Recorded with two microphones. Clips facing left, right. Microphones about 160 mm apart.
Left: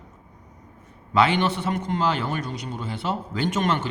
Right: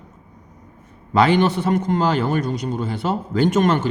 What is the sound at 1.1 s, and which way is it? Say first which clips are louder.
A man's voice: right 5 dB; 40° right (ahead or behind).